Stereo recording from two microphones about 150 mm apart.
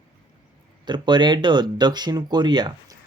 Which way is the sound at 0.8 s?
30° right (ahead or behind).